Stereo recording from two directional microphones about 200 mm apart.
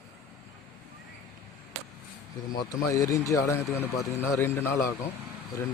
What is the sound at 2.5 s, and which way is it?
Speech, 15° left (ahead or behind).